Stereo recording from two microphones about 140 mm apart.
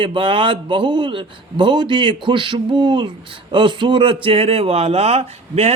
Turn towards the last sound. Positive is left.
turn(degrees=-45)  # may be behind; listen again after turning